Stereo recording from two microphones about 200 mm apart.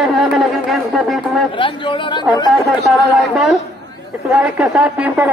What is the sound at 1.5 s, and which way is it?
Speech, 25° left (ahead or behind).